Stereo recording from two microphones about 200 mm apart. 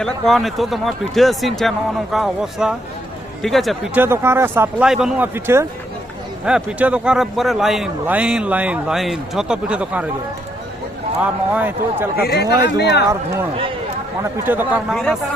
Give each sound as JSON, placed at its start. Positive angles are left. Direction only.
{"t": 0.0, "sound": "a man's voice", "side_deg": 0}
{"t": 4.0, "sound": "a man's voice", "side_deg": -10}
{"t": 11.2, "sound": "speech", "side_deg": -10}
{"t": 12.1, "sound": "speech", "side_deg": 55}
{"t": 14.2, "sound": "speech", "side_deg": -10}